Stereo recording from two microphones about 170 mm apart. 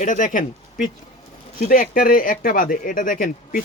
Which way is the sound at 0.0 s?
50° left (ahead or behind).